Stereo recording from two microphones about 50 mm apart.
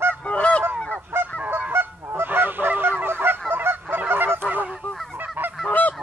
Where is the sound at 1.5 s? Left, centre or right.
Right.